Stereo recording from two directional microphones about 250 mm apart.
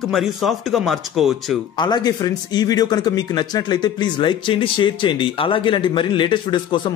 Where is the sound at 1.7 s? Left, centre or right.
Centre.